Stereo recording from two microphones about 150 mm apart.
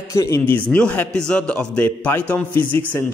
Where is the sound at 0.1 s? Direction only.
20° left (ahead or behind).